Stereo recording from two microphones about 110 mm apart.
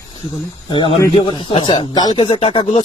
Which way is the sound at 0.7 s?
50° left (ahead or behind).